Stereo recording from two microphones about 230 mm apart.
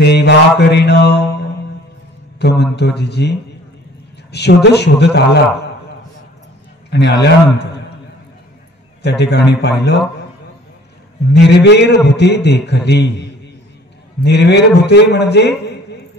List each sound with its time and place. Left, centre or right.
0.0 s mantra: left
2.6 s a man's voice: left
6.9 s a man's voice: left
9.0 s a man's voice: left
11.3 s a man's voice: left